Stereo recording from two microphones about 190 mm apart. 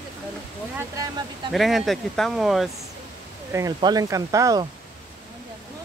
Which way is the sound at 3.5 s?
20° right (ahead or behind).